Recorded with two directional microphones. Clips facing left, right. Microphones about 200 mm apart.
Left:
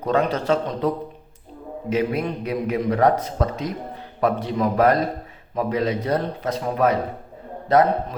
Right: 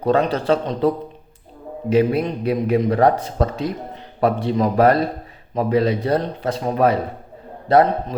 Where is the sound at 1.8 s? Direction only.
30° right (ahead or behind).